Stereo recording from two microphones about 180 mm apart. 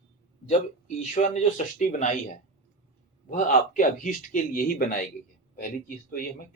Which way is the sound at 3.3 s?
45° left (ahead or behind).